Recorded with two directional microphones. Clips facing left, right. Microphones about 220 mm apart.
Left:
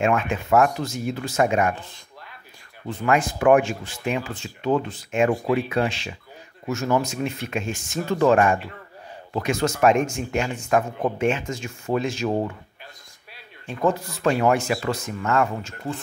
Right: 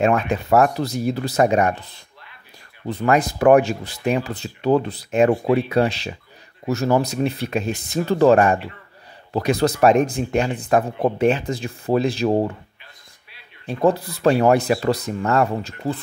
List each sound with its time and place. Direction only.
0.0 s speech: 35° right (ahead or behind)
2.9 s speech: 35° right (ahead or behind)
13.7 s speech: 35° right (ahead or behind)